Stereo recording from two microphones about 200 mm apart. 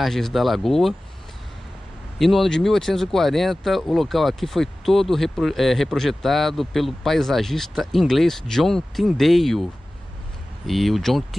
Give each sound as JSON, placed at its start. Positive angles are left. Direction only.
{"t": 0.0, "sound": "speech", "side_deg": 0}
{"t": 2.1, "sound": "speech", "side_deg": 0}
{"t": 10.7, "sound": "speech", "side_deg": 0}